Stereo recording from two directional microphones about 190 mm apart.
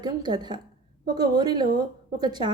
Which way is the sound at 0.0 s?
20° right (ahead or behind).